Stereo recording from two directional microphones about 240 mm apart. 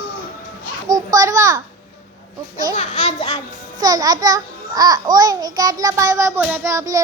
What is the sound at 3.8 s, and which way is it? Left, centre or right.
A child's voice, centre.